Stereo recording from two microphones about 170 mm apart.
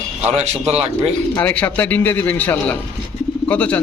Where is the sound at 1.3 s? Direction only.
10° left (ahead or behind).